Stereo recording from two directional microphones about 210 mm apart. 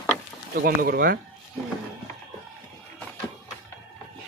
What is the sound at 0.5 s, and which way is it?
Speech, 45° right (ahead or behind).